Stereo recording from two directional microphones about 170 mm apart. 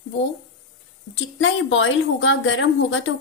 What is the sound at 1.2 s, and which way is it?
A woman's voice, 90° left.